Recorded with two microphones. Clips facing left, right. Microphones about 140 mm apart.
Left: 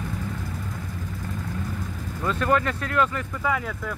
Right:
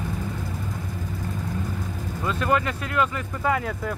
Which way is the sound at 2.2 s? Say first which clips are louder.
Left 1 dB; 15° right (ahead or behind).